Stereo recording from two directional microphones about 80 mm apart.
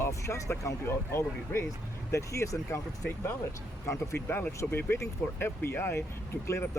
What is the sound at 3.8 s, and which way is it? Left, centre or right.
Speech, left.